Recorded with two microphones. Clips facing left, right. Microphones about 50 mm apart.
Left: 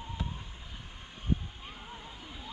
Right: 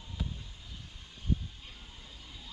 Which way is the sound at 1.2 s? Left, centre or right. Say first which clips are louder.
Left 2 dB; left.